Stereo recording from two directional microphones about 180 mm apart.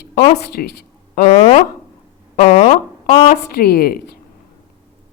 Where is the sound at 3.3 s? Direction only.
55° left (ahead or behind).